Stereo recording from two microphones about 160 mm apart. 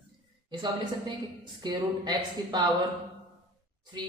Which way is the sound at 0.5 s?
30° right (ahead or behind).